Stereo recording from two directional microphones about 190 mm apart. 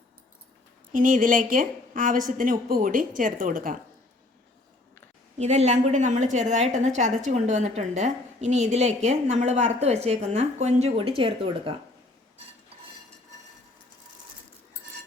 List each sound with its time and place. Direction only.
0.9 s a woman's voice: 45° right (ahead or behind)
5.4 s a woman's voice: 35° right (ahead or behind)